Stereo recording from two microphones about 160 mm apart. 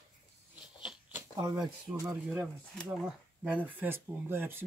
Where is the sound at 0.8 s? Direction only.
5° right (ahead or behind).